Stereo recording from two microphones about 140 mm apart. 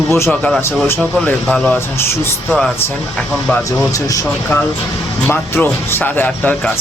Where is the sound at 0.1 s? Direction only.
15° left (ahead or behind).